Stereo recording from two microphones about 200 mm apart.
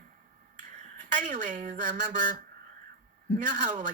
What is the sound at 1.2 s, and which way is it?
Speech, 40° right (ahead or behind).